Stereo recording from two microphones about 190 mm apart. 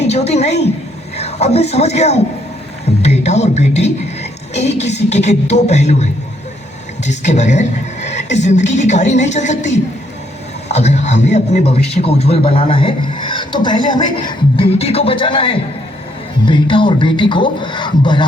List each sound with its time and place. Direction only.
0.0 s a woman's voice: 35° left (ahead or behind)